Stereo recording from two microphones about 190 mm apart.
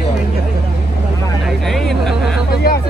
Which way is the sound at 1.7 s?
Centre (ahead or behind).